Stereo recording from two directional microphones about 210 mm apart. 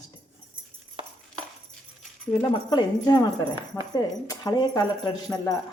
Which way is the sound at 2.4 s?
20° left (ahead or behind).